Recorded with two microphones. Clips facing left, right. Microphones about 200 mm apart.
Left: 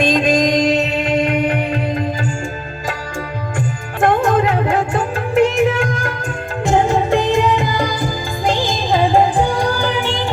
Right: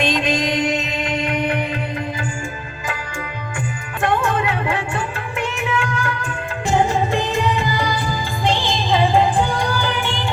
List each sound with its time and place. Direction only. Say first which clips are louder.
0.0 s music: left 5 dB; 45° left (ahead or behind)
4.0 s music: left 5 dB; 40° left (ahead or behind)